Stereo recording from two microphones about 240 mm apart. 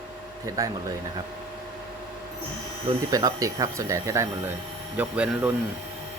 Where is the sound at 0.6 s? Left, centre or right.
Centre.